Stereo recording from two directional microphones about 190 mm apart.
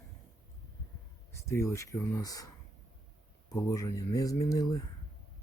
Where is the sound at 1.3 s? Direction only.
15° left (ahead or behind).